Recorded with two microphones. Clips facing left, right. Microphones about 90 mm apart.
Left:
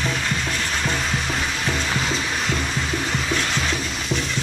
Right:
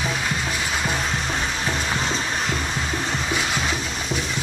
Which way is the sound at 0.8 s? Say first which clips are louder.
Even; 5° right (ahead or behind).